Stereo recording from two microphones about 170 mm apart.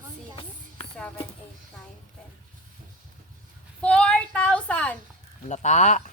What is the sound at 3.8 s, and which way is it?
Child singing, 5° left (ahead or behind).